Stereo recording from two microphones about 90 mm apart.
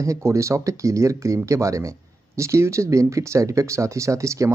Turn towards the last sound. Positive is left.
turn(degrees=-35)  # may be behind; listen again after turning